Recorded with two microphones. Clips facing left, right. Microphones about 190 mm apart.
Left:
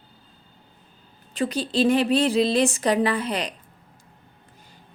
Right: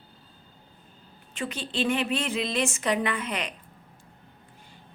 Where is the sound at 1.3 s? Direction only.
35° left (ahead or behind).